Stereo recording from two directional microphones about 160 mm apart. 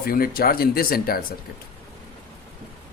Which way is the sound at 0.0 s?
65° left (ahead or behind).